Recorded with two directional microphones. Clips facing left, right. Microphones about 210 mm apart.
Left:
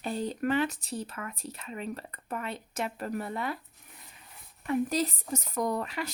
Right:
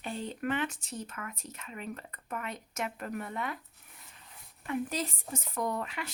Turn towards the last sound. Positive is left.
turn(degrees=40)  # may be behind; listen again after turning